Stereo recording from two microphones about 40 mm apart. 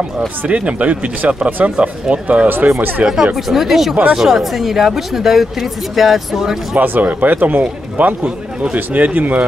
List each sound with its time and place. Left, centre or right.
0.5 s speech: right
2.4 s speech: right
3.3 s speech: centre
6.8 s speech: right